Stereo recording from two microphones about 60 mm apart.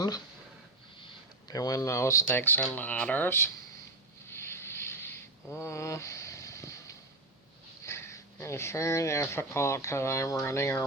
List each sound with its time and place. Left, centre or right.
1.5 s speech: left
2.2 s speech: left
2.7 s speech: left
3.2 s speech: left
4.3 s vehicle: left
5.5 s vehicle: left
7.9 s speech: left